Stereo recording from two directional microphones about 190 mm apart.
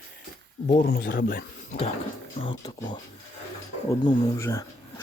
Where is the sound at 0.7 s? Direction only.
50° left (ahead or behind).